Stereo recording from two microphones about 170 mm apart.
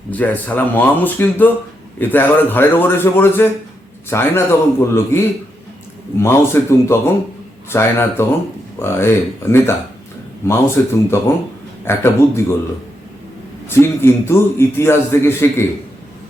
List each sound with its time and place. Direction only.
0.1 s a man's voice: 10° left (ahead or behind)
13.7 s a man's voice: 15° left (ahead or behind)